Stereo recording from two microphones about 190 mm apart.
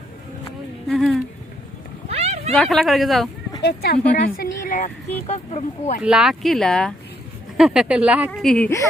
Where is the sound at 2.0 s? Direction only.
35° right (ahead or behind).